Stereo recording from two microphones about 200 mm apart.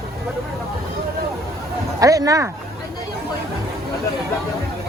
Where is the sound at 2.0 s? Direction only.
15° right (ahead or behind).